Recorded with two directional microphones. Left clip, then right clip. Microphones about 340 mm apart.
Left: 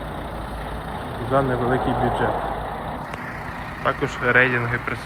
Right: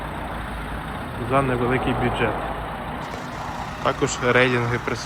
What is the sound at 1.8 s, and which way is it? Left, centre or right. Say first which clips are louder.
Speech: left 2 dB; centre.